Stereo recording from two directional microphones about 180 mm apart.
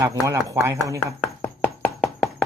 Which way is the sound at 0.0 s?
15° right (ahead or behind).